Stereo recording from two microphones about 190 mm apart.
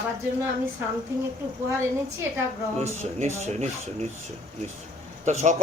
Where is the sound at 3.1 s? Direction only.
35° right (ahead or behind).